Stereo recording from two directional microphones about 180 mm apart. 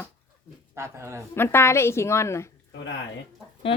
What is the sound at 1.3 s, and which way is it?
A woman's voice, 15° left (ahead or behind).